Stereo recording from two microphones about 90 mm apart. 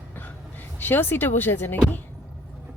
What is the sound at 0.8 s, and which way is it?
Speech, 25° left (ahead or behind).